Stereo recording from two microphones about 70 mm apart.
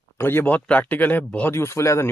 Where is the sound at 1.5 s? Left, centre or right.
Left.